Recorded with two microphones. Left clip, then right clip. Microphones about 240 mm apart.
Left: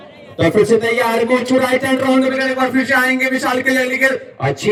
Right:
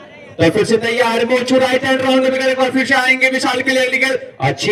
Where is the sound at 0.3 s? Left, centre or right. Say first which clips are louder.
Left 1 dB; right.